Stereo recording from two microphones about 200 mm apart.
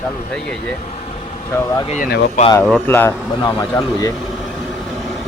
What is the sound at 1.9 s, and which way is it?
Speech, 40° left (ahead or behind).